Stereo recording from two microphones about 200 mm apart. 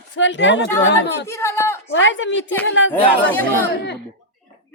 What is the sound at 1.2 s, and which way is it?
Speech, 15° left (ahead or behind).